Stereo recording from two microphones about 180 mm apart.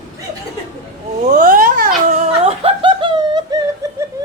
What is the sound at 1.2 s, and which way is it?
Laughter, 45° right (ahead or behind).